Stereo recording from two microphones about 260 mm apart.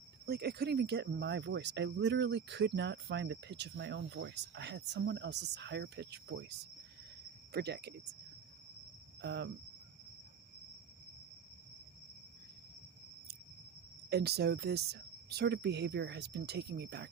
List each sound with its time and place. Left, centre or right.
0.3 s speech: right
7.5 s speech: right
9.2 s speech: right
14.1 s speech: right